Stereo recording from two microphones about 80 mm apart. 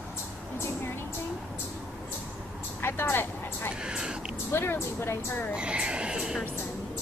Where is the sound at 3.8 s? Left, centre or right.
Centre.